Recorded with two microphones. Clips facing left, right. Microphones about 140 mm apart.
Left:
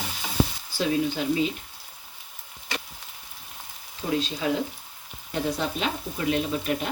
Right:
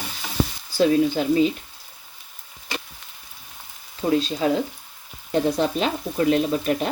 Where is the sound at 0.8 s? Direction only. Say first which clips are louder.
Right 7 dB; 40° right (ahead or behind).